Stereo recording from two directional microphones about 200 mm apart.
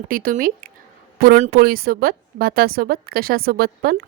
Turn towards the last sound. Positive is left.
turn(degrees=-50)  # may be behind; listen again after turning